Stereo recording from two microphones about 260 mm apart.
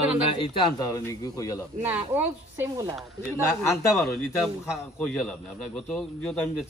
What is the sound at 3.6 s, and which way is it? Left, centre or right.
A man's voice, centre.